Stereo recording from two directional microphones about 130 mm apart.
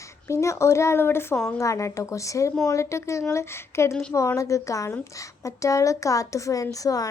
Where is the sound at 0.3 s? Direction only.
25° left (ahead or behind).